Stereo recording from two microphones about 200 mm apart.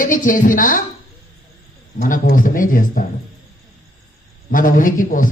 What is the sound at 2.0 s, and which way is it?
A man's voice, 40° left (ahead or behind).